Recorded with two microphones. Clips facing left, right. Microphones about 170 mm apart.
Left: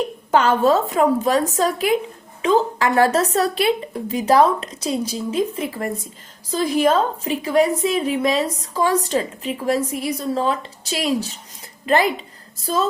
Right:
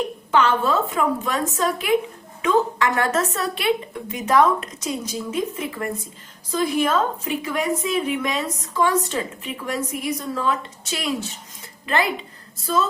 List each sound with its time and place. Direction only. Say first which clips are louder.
0.3 s a woman's voice: left 4 dB; 40° left (ahead or behind)